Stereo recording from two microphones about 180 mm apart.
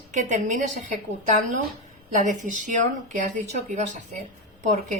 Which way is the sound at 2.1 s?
45° right (ahead or behind).